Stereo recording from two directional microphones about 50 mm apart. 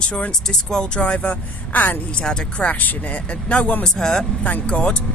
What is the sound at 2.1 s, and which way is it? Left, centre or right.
Speech, centre.